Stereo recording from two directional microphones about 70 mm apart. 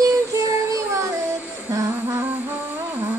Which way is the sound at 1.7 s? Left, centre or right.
Right.